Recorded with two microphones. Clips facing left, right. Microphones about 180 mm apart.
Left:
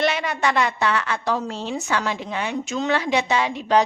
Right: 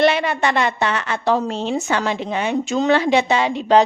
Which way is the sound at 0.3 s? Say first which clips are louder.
Right 3 dB; 25° right (ahead or behind).